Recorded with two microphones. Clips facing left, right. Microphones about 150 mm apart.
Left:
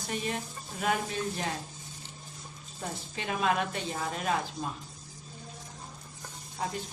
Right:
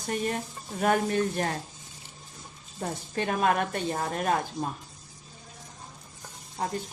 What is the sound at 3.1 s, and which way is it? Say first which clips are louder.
Speech: right 4 dB; 50° right (ahead or behind).